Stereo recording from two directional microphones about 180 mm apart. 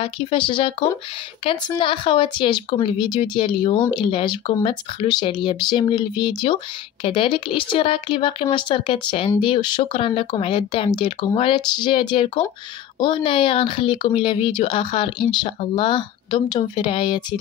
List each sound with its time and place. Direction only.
0.0 s speech: 30° left (ahead or behind)